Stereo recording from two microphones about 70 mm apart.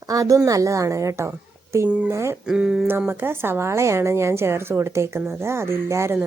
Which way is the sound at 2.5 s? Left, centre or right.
Centre.